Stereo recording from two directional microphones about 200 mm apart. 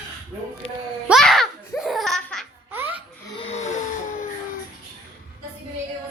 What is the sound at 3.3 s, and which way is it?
Wheeze, 30° left (ahead or behind).